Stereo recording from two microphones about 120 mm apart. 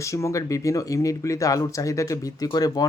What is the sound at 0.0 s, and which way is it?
A man's voice, 25° left (ahead or behind).